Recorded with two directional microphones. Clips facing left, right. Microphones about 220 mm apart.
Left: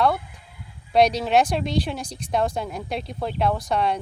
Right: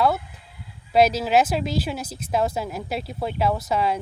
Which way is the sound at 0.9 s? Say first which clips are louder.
Even; 5° right (ahead or behind).